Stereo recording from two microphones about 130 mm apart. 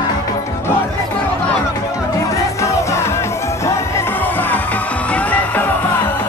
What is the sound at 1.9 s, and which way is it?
Music, 25° left (ahead or behind).